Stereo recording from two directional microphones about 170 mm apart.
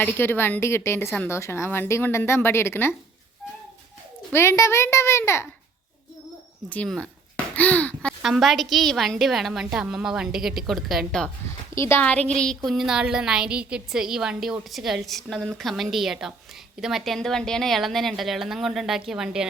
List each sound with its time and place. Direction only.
0.0 s a woman's voice: 15° left (ahead or behind)
4.3 s a woman's voice: 15° left (ahead or behind)
6.7 s a woman's voice: 5° left (ahead or behind)
11.4 s a woman's voice: 15° left (ahead or behind); by 19.5 s 5° right (ahead or behind)